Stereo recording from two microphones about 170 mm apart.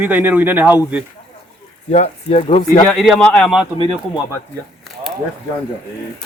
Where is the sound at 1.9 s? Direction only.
40° left (ahead or behind).